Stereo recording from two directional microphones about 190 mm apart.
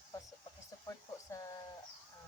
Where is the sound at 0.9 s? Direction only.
15° left (ahead or behind).